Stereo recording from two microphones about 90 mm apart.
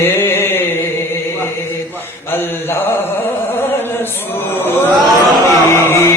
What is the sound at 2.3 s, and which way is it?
Chant, 25° left (ahead or behind).